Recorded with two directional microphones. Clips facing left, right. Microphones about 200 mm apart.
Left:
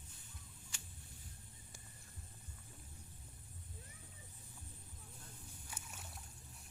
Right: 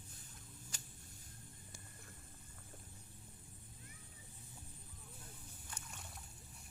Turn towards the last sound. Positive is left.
turn(degrees=5)  # may be behind; listen again after turning